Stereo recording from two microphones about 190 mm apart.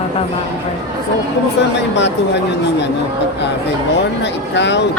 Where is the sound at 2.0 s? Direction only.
70° left (ahead or behind).